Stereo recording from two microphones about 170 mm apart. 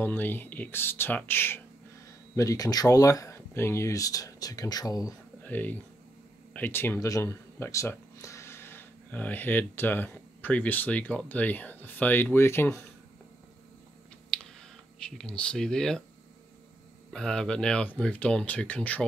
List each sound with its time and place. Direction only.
0.0 s speech: 10° left (ahead or behind)
5.4 s speech: 10° left (ahead or behind)
14.3 s a sound: 5° left (ahead or behind)
15.0 s speech: 5° left (ahead or behind)
17.1 s speech: 5° left (ahead or behind)